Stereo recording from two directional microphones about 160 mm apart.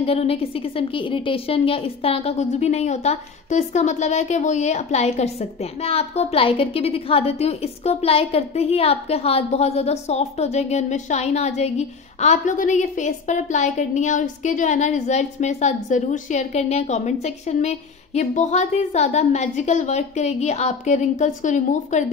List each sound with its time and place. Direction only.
0.0 s a woman's voice: 40° left (ahead or behind)